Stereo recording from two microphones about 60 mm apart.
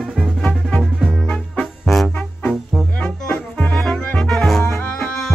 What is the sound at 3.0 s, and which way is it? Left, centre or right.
Music, centre.